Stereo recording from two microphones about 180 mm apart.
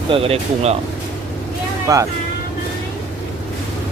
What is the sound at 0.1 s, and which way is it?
Speech, 30° right (ahead or behind).